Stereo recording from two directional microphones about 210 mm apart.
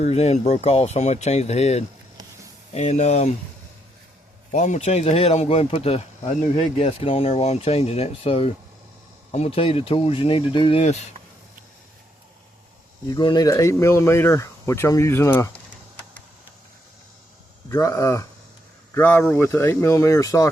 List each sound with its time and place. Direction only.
0.0 s speech: 30° left (ahead or behind)
4.5 s speech: 35° left (ahead or behind)
13.1 s speech: 20° left (ahead or behind)
17.7 s speech: 15° left (ahead or behind)